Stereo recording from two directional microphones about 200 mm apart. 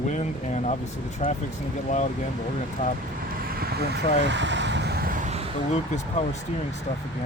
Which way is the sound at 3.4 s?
50° right (ahead or behind).